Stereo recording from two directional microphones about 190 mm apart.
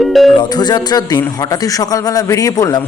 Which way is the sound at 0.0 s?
Centre (ahead or behind).